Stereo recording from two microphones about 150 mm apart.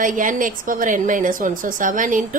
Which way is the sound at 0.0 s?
60° right (ahead or behind).